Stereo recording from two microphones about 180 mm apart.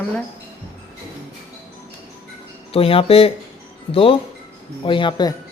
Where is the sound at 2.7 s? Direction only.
30° left (ahead or behind).